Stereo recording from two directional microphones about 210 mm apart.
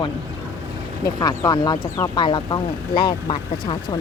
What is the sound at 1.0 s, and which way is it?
Speech, 15° left (ahead or behind).